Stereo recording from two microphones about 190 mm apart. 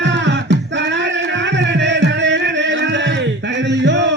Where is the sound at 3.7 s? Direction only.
70° right (ahead or behind).